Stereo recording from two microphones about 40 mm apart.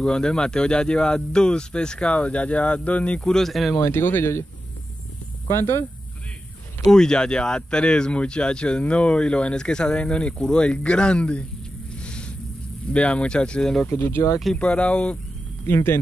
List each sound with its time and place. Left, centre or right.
0.0 s speech: centre
3.2 s speech: centre
3.4 s speech: centre
3.8 s speech: left
5.5 s speech: left
6.9 s speech: centre
12.0 s a sound: left
12.9 s speech: left
13.6 s speech: centre
13.8 s speech: left
14.6 s speech: left
15.6 s speech: left